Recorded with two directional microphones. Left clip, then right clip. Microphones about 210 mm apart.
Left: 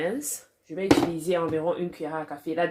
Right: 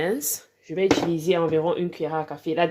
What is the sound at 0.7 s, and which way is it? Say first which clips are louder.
Speech: right 2 dB; 45° right (ahead or behind).